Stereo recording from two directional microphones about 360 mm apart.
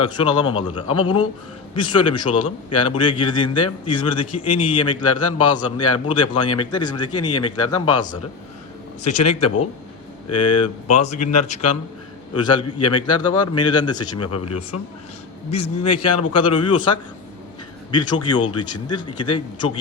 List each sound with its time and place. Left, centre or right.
0.0 s a man's voice: centre
14.2 s speech: left
15.4 s a man's voice: centre